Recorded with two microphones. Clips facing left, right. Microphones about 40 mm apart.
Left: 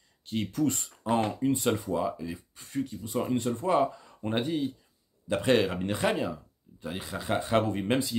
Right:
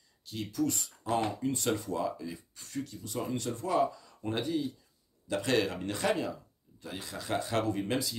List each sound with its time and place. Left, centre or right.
0.3 s speech: left
5.4 s speech: left